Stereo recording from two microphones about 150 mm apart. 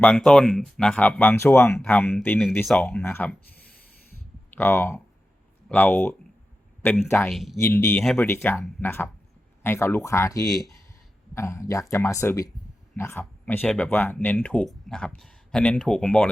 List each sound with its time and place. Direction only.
0.0 s speech: 5° left (ahead or behind)
4.5 s speech: 15° left (ahead or behind)
7.3 s speech: centre (ahead or behind)
7.6 s speech: 15° left (ahead or behind)
8.0 s speech: centre (ahead or behind)
8.3 s speech: 15° left (ahead or behind)